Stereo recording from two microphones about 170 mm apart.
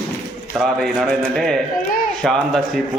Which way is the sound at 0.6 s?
Centre (ahead or behind).